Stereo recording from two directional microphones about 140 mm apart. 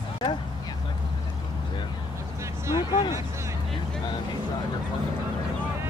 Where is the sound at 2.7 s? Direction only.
35° left (ahead or behind).